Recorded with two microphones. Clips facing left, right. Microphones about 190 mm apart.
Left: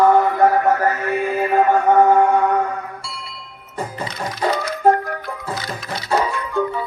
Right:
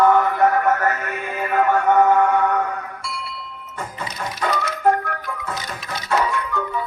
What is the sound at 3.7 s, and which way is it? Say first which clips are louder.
Music: left 4 dB; 35° left (ahead or behind).